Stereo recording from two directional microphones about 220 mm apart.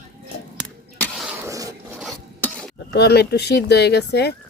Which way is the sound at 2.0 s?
5° left (ahead or behind).